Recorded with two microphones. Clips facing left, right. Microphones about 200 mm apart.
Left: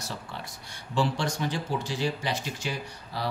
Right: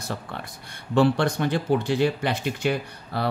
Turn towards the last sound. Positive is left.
turn(degrees=-60)  # may be behind; listen again after turning